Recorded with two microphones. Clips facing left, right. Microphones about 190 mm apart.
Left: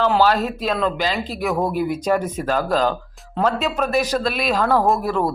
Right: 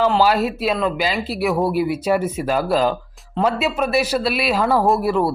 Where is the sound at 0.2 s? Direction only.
10° right (ahead or behind).